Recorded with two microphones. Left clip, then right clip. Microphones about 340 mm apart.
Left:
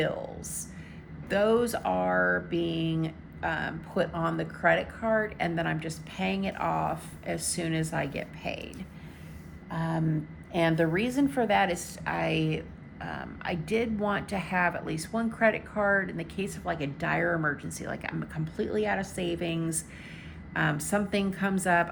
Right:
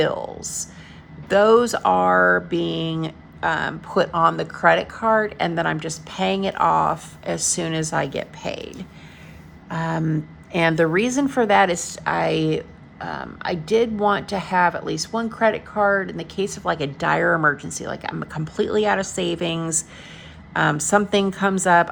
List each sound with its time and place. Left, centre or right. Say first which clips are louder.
0.0 s a woman's voice: right 9 dB; centre